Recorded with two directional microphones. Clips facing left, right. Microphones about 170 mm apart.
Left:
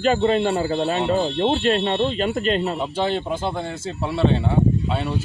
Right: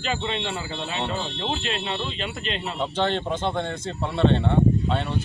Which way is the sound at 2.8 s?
10° left (ahead or behind).